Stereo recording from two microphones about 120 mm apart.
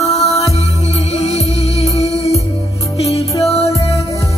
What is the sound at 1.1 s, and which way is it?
Music, 60° left (ahead or behind).